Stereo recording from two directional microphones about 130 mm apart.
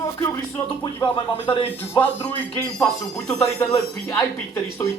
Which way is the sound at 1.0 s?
40° left (ahead or behind).